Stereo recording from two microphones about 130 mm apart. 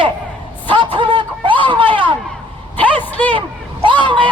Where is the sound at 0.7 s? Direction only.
40° right (ahead or behind).